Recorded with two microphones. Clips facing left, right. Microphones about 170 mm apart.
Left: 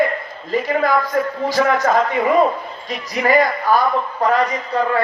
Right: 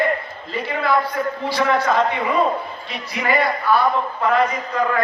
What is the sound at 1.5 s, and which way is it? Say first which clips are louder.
A man's voice: left 2 dB; 45° left (ahead or behind).